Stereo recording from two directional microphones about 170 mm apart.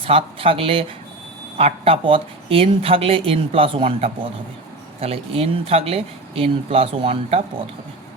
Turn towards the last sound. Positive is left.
turn(degrees=-35)  # may be behind; listen again after turning